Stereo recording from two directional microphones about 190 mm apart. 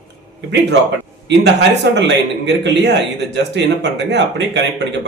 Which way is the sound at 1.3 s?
65° right (ahead or behind).